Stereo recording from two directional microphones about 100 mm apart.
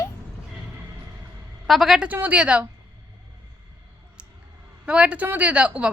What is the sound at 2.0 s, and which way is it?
Speech, 15° right (ahead or behind).